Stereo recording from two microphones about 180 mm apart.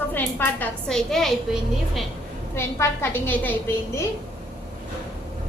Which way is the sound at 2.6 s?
15° left (ahead or behind).